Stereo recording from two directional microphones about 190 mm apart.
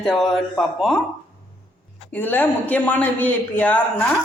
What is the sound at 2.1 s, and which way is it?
A woman's voice, 10° left (ahead or behind).